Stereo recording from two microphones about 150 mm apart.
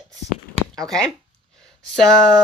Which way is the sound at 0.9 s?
5° left (ahead or behind).